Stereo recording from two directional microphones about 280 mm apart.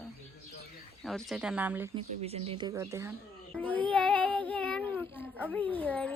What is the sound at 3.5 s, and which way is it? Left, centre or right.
Child singing, centre.